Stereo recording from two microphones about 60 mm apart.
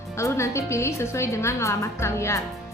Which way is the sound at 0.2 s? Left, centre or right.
Left.